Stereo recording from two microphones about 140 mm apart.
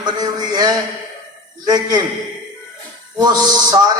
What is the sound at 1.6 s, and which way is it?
Speech, 30° right (ahead or behind).